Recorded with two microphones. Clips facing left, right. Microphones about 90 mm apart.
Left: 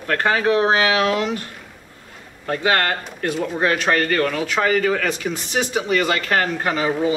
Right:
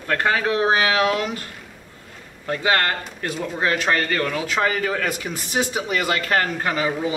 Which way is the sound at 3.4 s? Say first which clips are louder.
Left 2 dB; 15° left (ahead or behind).